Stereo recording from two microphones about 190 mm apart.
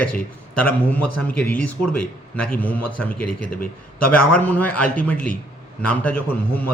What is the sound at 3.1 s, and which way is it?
Speech, 50° left (ahead or behind).